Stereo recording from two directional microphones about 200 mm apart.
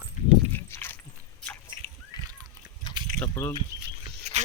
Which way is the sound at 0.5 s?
10° left (ahead or behind).